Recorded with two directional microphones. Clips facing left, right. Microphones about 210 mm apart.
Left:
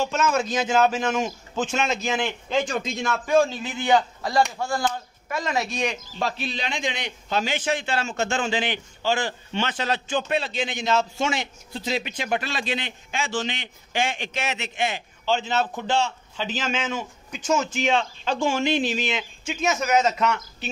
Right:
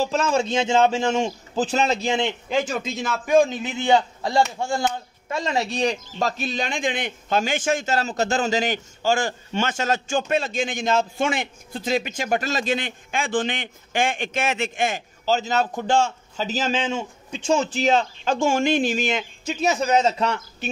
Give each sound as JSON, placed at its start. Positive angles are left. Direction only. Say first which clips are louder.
{"t": 0.0, "sound": "a man's voice", "louder": "right 2 dB", "side_deg": -30}
{"t": 2.5, "sound": "speech", "louder": "left 1 dB", "side_deg": -5}
{"t": 3.3, "sound": "a man's voice", "louder": "right 3 dB", "side_deg": -15}
{"t": 20.6, "sound": "a man's voice", "louder": "right 5 dB", "side_deg": -50}